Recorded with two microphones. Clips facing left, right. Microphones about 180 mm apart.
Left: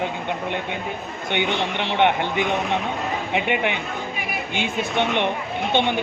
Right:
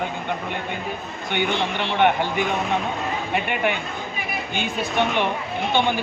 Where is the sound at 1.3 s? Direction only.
20° left (ahead or behind).